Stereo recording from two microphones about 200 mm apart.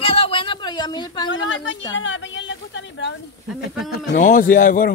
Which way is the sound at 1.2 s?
65° left (ahead or behind).